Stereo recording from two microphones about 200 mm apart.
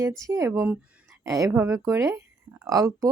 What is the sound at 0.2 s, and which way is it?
A woman's voice, 15° right (ahead or behind).